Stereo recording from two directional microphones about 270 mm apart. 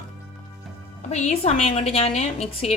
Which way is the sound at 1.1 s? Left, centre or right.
Left.